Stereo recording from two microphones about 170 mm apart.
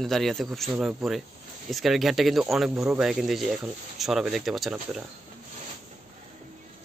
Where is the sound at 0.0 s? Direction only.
Centre (ahead or behind).